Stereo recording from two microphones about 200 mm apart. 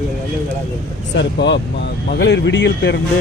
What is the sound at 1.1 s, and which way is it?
Speech, 60° left (ahead or behind).